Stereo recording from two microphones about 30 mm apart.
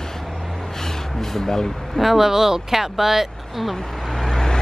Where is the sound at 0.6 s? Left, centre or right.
Centre.